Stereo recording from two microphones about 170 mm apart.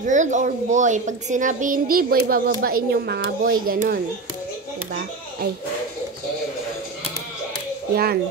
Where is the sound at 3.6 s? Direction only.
55° right (ahead or behind).